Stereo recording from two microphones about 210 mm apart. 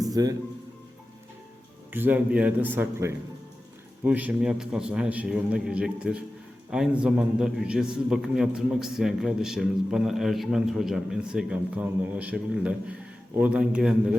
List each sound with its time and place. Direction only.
0.1 s speech: 15° right (ahead or behind)
1.9 s a man's voice: 10° right (ahead or behind)